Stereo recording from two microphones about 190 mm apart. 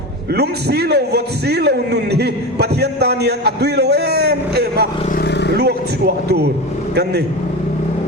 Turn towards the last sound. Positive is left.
turn(degrees=-60)  # may be behind; listen again after turning